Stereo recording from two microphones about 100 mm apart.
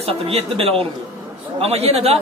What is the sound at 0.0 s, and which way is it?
Speech, 85° right.